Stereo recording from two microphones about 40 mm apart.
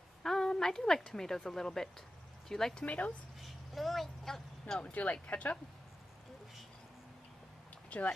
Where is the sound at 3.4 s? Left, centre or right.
Centre.